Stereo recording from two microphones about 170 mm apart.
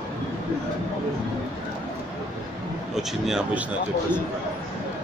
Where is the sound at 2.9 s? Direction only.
5° right (ahead or behind).